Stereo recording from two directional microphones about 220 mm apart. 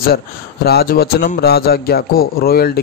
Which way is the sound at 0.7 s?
45° left (ahead or behind).